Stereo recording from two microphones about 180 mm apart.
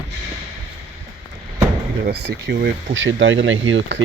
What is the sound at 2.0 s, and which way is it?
Speech, 70° right (ahead or behind).